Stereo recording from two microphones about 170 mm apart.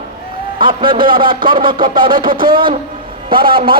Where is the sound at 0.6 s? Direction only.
30° right (ahead or behind).